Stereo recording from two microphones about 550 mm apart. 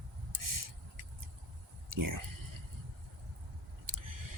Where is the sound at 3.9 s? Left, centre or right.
Right.